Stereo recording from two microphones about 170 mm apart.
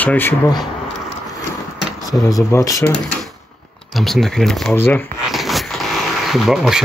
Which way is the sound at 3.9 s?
Centre (ahead or behind).